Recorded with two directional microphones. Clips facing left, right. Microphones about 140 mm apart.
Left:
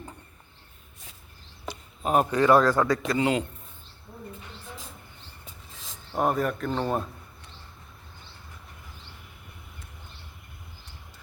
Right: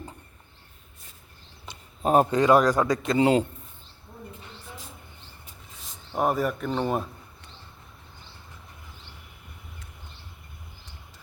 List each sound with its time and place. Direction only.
1.7 s a sound: 30° right (ahead or behind)
2.4 s a man's voice: 15° right (ahead or behind)
3.2 s a man's voice: 35° right (ahead or behind)
6.1 s speech: 5° right (ahead or behind)